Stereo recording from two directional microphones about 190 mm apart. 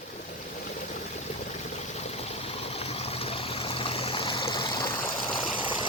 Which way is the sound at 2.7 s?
30° left (ahead or behind).